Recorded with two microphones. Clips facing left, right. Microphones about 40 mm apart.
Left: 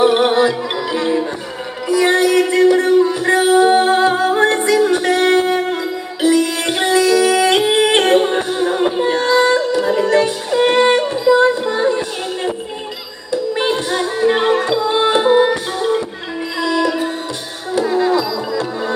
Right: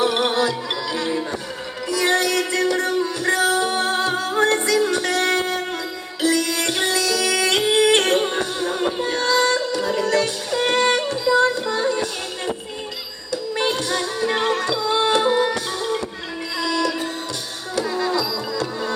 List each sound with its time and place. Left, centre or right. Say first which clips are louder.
0.0 s music: left 7 dB; left